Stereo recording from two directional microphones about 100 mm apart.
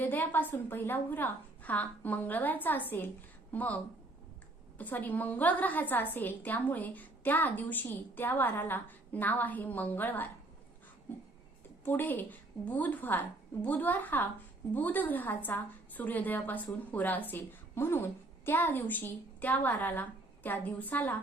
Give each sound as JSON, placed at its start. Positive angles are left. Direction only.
{"t": 0.0, "sound": "a woman's voice", "side_deg": 20}
{"t": 4.8, "sound": "a woman's voice", "side_deg": 15}
{"t": 11.9, "sound": "a woman's voice", "side_deg": 20}